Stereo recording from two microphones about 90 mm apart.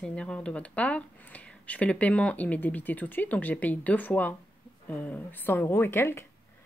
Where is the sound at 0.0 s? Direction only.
10° left (ahead or behind).